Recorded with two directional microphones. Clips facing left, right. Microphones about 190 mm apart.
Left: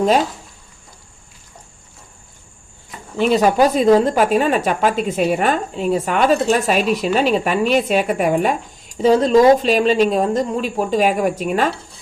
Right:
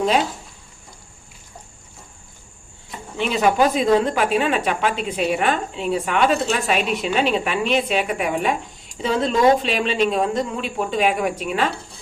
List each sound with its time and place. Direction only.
3.2 s a woman's voice: 40° left (ahead or behind)